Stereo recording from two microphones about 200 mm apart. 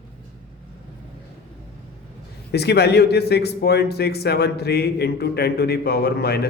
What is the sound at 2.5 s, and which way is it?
A man's voice, 55° left (ahead or behind).